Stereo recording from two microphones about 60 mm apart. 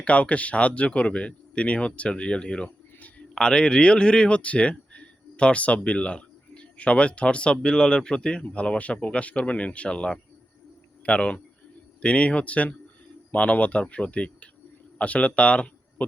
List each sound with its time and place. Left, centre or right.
0.0 s speech: left